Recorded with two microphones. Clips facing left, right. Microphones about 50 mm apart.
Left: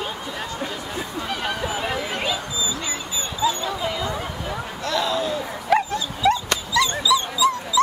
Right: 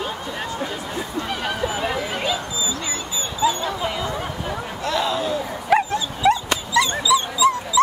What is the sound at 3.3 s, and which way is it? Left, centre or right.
Dog, centre.